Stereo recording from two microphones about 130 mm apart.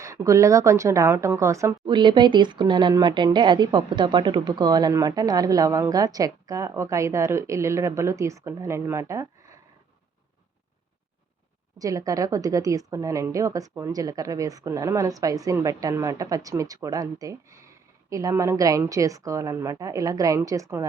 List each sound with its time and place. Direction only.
0.0 s a woman's voice: 25° right (ahead or behind)
1.9 s a woman's voice: 35° right (ahead or behind)
11.8 s a woman's voice: 25° right (ahead or behind)